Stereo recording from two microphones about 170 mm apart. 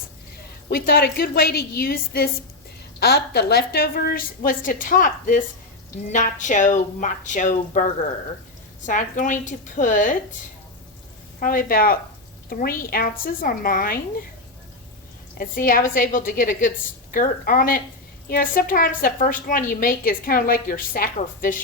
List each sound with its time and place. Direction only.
0.7 s a woman's voice: 60° left (ahead or behind)
8.9 s a woman's voice: 50° left (ahead or behind)
11.3 s a woman's voice: 55° left (ahead or behind)
15.4 s a woman's voice: 55° left (ahead or behind)